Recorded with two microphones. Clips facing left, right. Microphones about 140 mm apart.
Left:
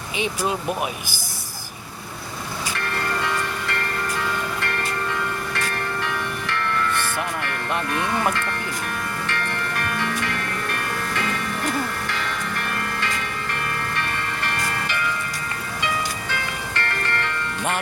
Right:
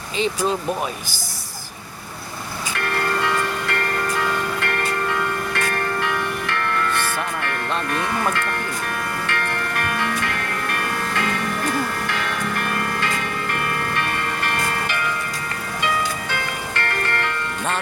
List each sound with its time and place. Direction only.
4.6 s music: 55° right (ahead or behind)
9.2 s music: 55° right (ahead or behind)
16.3 s bell: 50° right (ahead or behind)